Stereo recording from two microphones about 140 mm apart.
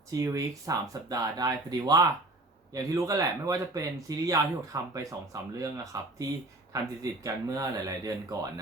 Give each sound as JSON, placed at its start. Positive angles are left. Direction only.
{"t": 0.1, "sound": "speech", "side_deg": -25}